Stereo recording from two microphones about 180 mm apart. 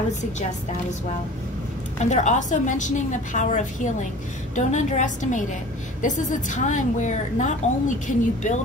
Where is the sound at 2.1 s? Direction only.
40° left (ahead or behind).